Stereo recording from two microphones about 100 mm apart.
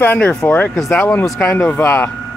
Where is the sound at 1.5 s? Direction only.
20° left (ahead or behind).